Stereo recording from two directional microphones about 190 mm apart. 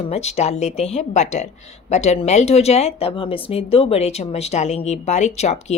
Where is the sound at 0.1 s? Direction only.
35° left (ahead or behind).